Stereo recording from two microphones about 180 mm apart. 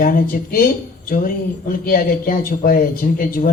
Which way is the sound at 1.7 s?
55° left (ahead or behind).